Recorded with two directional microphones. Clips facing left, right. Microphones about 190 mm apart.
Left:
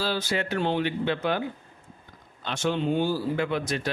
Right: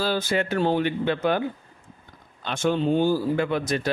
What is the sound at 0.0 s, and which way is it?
Speech, 50° right (ahead or behind).